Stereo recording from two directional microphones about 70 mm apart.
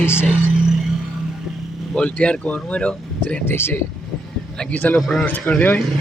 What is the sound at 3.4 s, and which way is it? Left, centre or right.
Speech, left.